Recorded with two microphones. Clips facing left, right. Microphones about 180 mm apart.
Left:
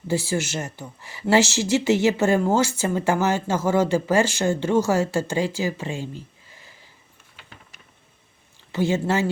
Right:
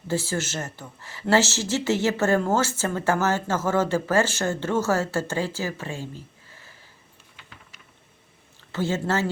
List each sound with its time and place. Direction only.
0.1 s speech: 15° left (ahead or behind)
6.5 s a sound: 15° left (ahead or behind)
8.7 s speech: 15° left (ahead or behind)